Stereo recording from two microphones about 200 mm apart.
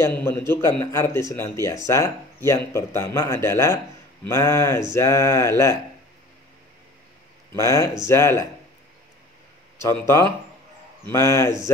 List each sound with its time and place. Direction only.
0.0 s speech: 10° left (ahead or behind)
7.5 s speech: 15° left (ahead or behind)
9.8 s speech: 10° left (ahead or behind)